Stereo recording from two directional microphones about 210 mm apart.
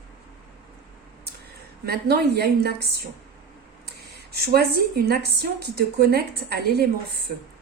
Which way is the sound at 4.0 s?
50° right (ahead or behind).